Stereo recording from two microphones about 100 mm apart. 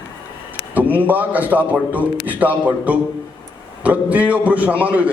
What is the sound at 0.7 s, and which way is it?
A man's voice, 15° right (ahead or behind).